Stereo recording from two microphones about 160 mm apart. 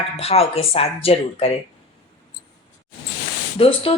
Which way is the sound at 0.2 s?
40° left (ahead or behind).